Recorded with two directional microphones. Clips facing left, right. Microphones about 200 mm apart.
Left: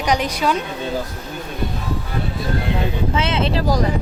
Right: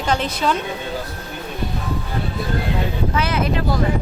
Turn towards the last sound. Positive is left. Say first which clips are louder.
# left 1 dB
turn(degrees=25)  # may be behind; listen again after turning